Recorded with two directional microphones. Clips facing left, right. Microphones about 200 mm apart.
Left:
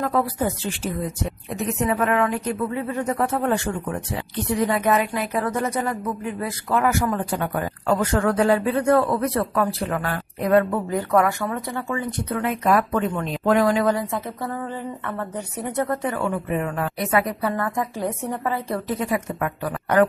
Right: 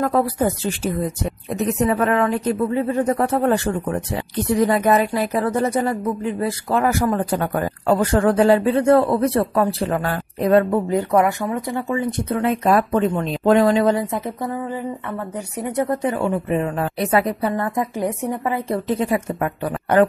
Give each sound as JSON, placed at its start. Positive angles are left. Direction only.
{"t": 0.0, "sound": "a woman's voice", "side_deg": -40}
{"t": 1.8, "sound": "speech", "side_deg": -35}